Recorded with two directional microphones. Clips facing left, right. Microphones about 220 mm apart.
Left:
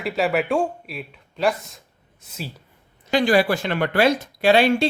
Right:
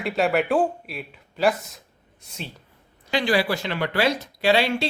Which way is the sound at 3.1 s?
50° left (ahead or behind).